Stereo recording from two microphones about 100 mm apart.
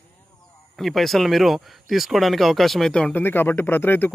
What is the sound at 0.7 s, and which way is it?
Speech, centre (ahead or behind).